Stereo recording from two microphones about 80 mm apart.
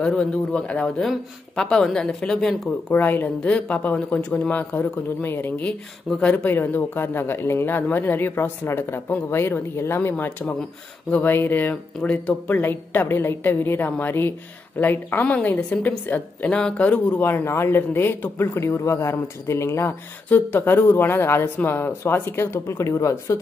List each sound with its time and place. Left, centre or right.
0.0 s speech: centre
2.9 s speech: left
6.0 s speech: centre
6.3 s speech: left
12.0 s speech: centre
12.4 s speech: left